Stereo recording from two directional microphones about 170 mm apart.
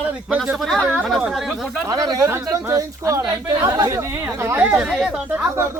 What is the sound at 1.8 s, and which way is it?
Speech, 20° right (ahead or behind).